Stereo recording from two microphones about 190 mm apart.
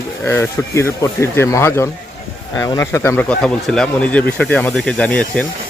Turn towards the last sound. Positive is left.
turn(degrees=5)  # may be behind; listen again after turning